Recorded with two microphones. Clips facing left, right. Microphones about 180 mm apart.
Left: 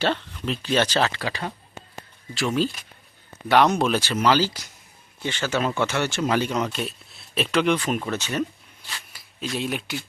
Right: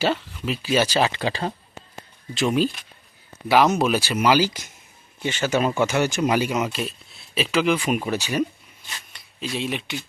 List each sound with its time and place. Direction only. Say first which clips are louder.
0.0 s speech: right 1 dB; 5° right (ahead or behind)
1.3 s speech: right 4 dB; 30° right (ahead or behind)
2.3 s speech: right 3 dB; 20° right (ahead or behind)
3.5 s speech: right 1 dB; 5° right (ahead or behind)
9.1 s speech: even; centre (ahead or behind)